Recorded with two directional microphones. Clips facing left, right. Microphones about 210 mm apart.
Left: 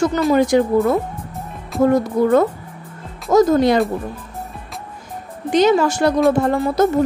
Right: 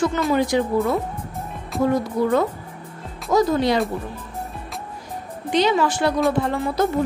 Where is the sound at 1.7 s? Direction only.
Centre (ahead or behind).